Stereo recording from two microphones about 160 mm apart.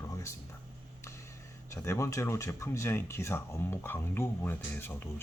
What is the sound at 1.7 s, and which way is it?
Speech, 20° left (ahead or behind).